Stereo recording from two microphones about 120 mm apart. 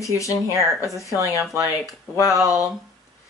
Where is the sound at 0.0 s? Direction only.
25° left (ahead or behind).